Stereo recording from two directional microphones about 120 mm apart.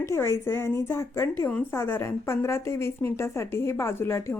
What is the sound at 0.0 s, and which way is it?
Speech, 20° left (ahead or behind).